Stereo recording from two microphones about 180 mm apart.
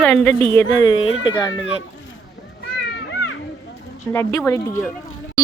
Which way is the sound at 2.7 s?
90° left.